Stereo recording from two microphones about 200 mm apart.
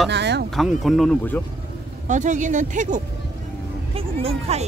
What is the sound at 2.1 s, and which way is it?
Speech, 40° right (ahead or behind).